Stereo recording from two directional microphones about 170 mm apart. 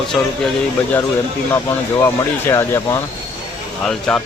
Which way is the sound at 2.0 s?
15° left (ahead or behind).